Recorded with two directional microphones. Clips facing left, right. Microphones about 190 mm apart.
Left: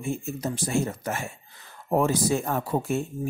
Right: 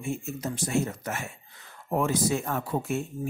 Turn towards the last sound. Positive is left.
turn(degrees=35)  # may be behind; listen again after turning